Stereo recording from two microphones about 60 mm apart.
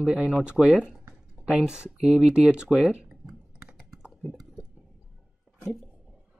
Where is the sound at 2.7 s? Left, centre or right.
Centre.